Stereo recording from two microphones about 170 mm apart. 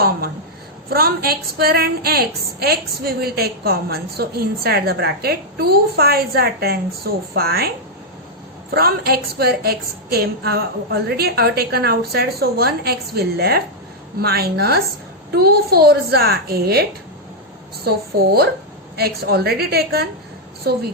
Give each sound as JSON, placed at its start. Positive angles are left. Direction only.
{"t": 0.9, "sound": "a woman's voice", "side_deg": -65}
{"t": 8.7, "sound": "a woman's voice", "side_deg": -65}
{"t": 17.8, "sound": "a woman's voice", "side_deg": -70}